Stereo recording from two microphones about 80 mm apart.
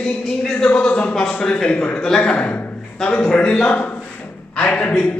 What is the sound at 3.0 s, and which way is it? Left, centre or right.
A man's voice, centre.